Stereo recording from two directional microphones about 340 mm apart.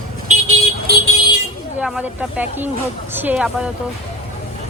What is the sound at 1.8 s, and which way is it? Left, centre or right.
Speech, centre.